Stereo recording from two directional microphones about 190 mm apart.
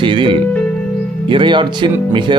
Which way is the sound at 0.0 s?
25° right (ahead or behind).